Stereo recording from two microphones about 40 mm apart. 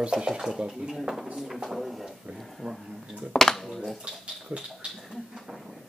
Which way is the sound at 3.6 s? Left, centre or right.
Centre.